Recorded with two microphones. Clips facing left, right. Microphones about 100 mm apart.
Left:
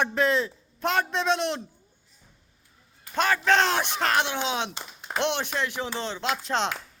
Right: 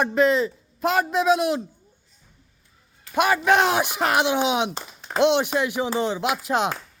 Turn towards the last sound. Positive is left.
turn(degrees=-10)  # may be behind; listen again after turning